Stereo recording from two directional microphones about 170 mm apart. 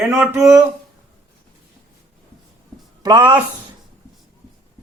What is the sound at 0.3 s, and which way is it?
Speech, 15° right (ahead or behind).